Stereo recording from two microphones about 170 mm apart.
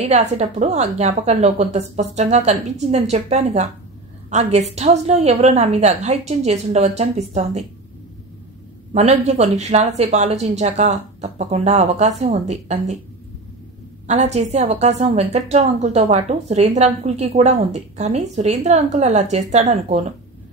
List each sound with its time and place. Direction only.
0.0 s a woman's voice: 40° right (ahead or behind)
8.9 s a woman's voice: 40° right (ahead or behind)
14.0 s a woman's voice: 40° right (ahead or behind)